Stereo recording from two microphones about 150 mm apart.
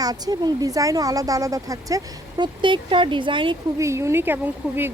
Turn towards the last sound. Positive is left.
turn(degrees=-15)  # may be behind; listen again after turning